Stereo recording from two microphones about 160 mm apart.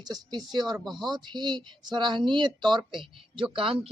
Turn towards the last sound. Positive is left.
turn(degrees=-35)  # may be behind; listen again after turning